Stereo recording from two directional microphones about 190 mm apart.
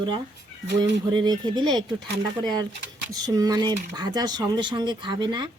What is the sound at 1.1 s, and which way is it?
Speech, 25° right (ahead or behind).